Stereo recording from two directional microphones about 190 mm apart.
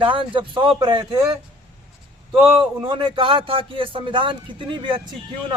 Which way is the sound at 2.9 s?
25° right (ahead or behind).